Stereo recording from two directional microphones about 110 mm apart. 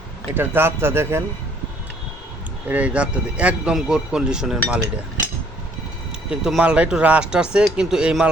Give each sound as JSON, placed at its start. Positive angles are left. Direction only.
{"t": 0.3, "sound": "speech", "side_deg": -20}
{"t": 2.6, "sound": "speech", "side_deg": -15}
{"t": 6.3, "sound": "speech", "side_deg": -5}